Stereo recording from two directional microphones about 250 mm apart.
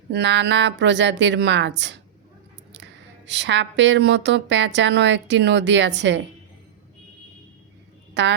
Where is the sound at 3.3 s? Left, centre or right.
Right.